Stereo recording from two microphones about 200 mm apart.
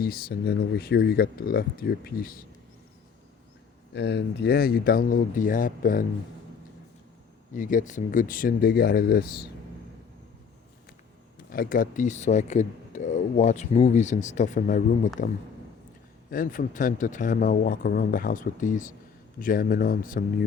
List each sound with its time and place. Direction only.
0.0 s speech: 50° left (ahead or behind)
3.9 s speech: 60° left (ahead or behind)
7.5 s speech: 40° left (ahead or behind)
11.5 s speech: 45° left (ahead or behind)
16.3 s speech: 45° left (ahead or behind)